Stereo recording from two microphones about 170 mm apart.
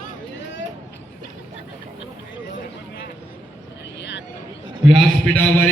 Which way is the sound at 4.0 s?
90° left.